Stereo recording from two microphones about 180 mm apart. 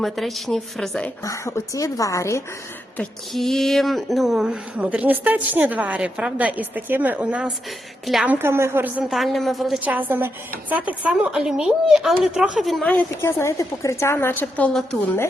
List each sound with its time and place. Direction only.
0.0 s a woman's voice: centre (ahead or behind)
1.2 s a woman's voice: 15° left (ahead or behind)
3.0 s a woman's voice: centre (ahead or behind)